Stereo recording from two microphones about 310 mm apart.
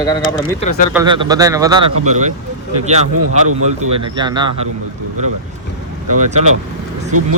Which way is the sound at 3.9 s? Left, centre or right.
Centre.